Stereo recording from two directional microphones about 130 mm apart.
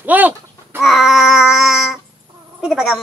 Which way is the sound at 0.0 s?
15° right (ahead or behind).